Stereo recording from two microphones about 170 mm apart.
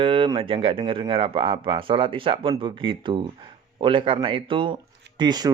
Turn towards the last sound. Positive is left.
turn(degrees=-25)  # may be behind; listen again after turning